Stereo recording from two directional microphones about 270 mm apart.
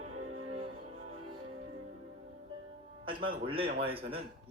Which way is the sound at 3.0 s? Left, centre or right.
Centre.